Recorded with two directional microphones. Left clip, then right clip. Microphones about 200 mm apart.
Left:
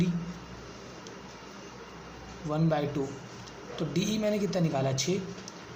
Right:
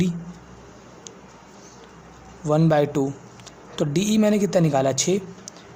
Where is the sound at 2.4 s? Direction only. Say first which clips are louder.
Right 11 dB; 50° right (ahead or behind).